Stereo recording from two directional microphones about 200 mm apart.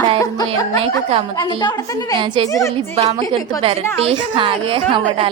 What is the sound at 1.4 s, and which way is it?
Speech, 20° left (ahead or behind).